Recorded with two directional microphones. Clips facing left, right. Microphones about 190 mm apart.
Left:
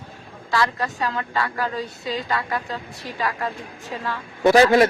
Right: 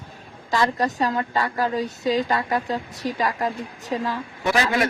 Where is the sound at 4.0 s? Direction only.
15° right (ahead or behind).